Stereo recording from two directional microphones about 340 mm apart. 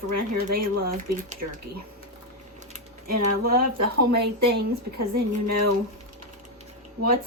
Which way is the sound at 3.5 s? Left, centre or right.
Right.